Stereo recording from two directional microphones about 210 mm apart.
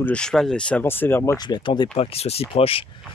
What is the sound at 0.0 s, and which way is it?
Speech, 5° left (ahead or behind).